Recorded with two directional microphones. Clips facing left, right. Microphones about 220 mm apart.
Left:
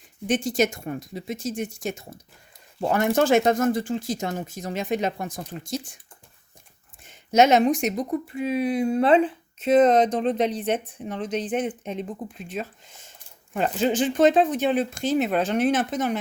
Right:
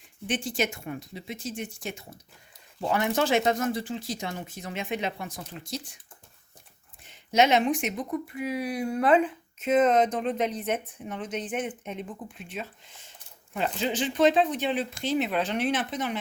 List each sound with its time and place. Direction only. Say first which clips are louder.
0.3 s speech: left 6 dB; 45° left (ahead or behind)
7.0 s speech: left 4 dB; 45° left (ahead or behind)